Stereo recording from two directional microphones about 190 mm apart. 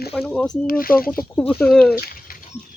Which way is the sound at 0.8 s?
50° left (ahead or behind).